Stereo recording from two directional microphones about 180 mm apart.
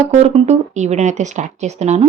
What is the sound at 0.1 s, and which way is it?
Speech, 35° right (ahead or behind).